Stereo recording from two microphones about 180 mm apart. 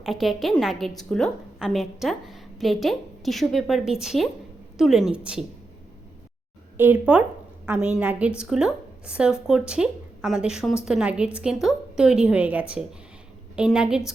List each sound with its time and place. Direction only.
0.0 s a woman's voice: centre (ahead or behind)
6.7 s a woman's voice: 10° right (ahead or behind)